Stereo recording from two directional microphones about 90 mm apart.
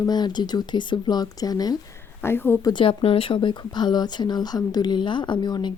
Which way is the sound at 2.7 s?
70° left (ahead or behind).